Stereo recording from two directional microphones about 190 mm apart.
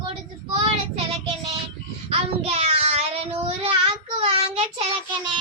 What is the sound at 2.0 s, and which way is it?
Child singing, 30° right (ahead or behind).